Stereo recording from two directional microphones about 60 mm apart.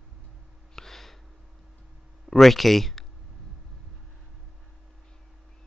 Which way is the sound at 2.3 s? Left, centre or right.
Centre.